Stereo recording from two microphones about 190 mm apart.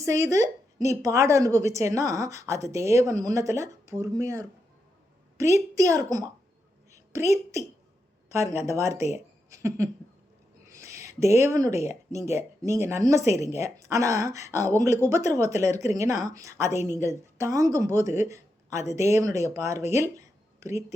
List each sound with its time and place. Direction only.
0.0 s a woman's voice: 15° right (ahead or behind)
8.3 s a woman's voice: 15° right (ahead or behind)
19.9 s a sound: 15° right (ahead or behind)